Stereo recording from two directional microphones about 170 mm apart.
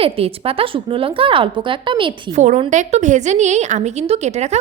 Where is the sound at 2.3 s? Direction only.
45° right (ahead or behind).